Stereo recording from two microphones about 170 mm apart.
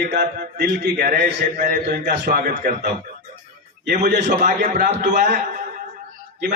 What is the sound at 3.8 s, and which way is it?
A man's voice, 50° right (ahead or behind).